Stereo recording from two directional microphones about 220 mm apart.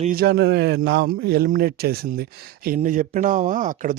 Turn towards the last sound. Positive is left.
turn(degrees=-35)  # may be behind; listen again after turning